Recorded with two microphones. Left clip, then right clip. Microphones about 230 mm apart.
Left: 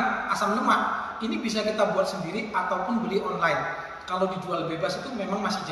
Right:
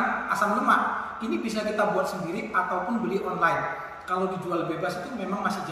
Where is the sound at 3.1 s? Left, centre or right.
Centre.